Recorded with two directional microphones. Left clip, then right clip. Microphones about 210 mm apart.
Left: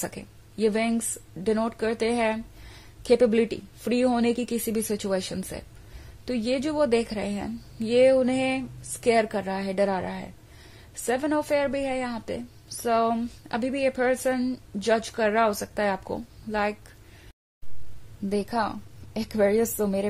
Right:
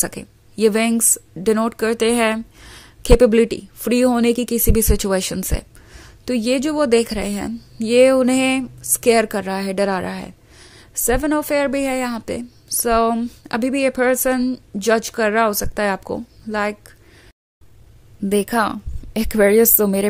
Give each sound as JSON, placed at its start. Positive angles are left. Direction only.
{"t": 0.0, "sound": "a woman's voice", "side_deg": -25}
{"t": 18.3, "sound": "a woman's voice", "side_deg": -35}